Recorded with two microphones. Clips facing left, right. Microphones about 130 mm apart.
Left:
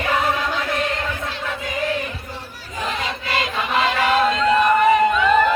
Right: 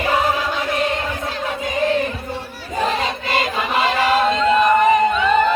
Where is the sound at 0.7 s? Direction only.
20° right (ahead or behind).